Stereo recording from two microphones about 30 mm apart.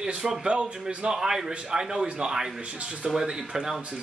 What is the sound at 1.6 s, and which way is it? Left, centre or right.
Speech, right.